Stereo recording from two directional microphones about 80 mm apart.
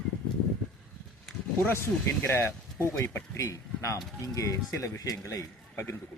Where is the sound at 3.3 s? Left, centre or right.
Left.